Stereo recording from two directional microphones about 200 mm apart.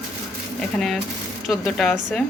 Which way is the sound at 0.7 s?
Centre (ahead or behind).